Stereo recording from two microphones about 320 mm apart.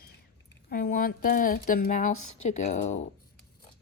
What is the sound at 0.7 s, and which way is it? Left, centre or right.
Speech, left.